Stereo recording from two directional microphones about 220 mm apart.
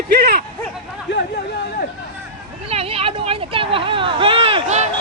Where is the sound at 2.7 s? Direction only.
25° right (ahead or behind).